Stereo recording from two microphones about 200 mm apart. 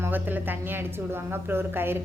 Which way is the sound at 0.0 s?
10° right (ahead or behind).